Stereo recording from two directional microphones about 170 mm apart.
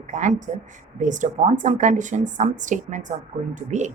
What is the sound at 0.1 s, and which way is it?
Speech, 45° right (ahead or behind).